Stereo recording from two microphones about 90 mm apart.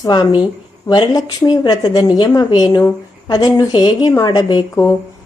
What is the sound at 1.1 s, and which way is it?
A woman's voice, 50° left (ahead or behind).